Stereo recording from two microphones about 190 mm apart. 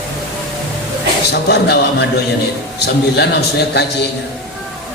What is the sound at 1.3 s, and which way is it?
Speech, 60° left (ahead or behind).